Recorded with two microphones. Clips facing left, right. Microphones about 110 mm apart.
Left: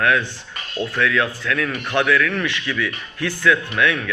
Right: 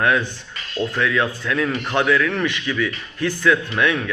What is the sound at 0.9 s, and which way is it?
Speech, 20° right (ahead or behind).